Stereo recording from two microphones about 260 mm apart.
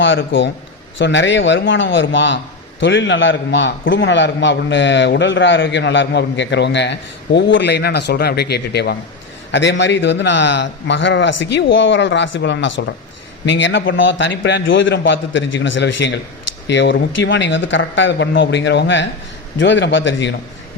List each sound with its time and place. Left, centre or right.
0.0 s a man's voice: left